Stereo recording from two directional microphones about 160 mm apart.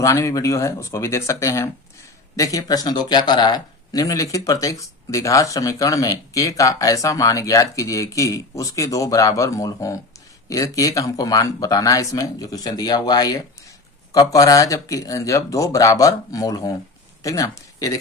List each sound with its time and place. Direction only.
0.0 s speech: 20° left (ahead or behind)